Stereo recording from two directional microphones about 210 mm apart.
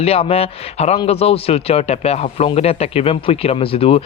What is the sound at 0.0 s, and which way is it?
Speech, 30° left (ahead or behind).